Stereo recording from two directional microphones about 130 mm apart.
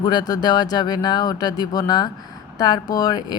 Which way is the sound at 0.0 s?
30° left (ahead or behind).